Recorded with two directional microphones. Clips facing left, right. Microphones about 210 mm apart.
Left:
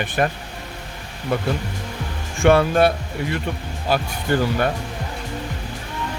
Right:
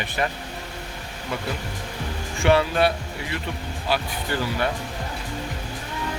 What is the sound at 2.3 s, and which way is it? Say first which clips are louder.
Speech: left 4 dB; 50° left (ahead or behind).